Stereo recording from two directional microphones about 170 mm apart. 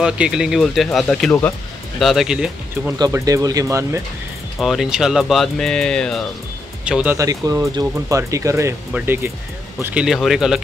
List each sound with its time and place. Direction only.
0.0 s speech: 5° right (ahead or behind)
3.0 s speech: 20° right (ahead or behind)
4.6 s speech: centre (ahead or behind)
6.8 s speech: 5° right (ahead or behind)
7.2 s speech: 20° right (ahead or behind); by 10.6 s 5° right (ahead or behind)